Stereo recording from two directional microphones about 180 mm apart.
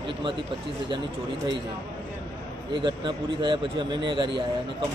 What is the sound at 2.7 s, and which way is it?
A man's voice, 25° right (ahead or behind).